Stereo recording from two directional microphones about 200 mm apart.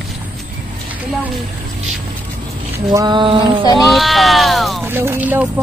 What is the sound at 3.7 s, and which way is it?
Speech, centre (ahead or behind).